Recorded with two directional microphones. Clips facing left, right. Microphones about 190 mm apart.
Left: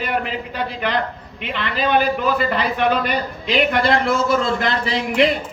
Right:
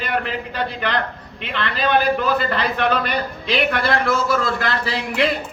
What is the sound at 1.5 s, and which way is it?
A man's voice, 10° left (ahead or behind).